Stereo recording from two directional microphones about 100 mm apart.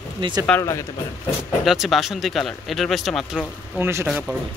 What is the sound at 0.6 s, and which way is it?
Speech, 30° left (ahead or behind).